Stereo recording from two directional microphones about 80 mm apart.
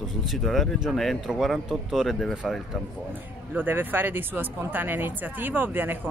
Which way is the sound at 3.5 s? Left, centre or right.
Right.